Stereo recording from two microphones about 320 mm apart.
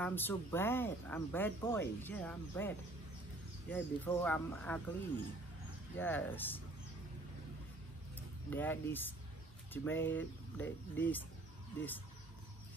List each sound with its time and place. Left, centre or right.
0.0 s speech: centre
3.7 s speech: centre
5.9 s speech: centre
8.5 s speech: centre